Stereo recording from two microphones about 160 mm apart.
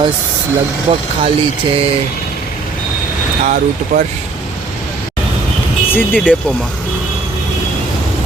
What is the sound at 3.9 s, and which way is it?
Speech, 50° right (ahead or behind).